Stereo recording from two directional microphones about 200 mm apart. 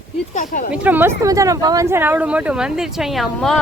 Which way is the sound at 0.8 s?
10° right (ahead or behind).